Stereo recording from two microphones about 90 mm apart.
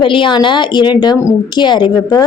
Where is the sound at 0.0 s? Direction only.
65° left (ahead or behind).